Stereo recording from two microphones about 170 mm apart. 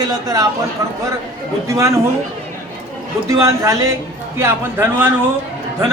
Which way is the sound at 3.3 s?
20° right (ahead or behind).